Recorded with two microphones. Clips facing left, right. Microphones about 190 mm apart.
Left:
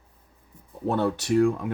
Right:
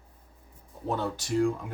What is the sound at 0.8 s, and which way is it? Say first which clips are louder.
Speech: left 6 dB; 65° left (ahead or behind).